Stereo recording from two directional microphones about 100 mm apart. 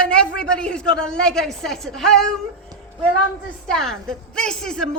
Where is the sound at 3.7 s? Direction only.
5° left (ahead or behind).